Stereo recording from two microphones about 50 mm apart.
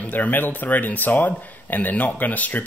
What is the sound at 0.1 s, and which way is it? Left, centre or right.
Speech, left.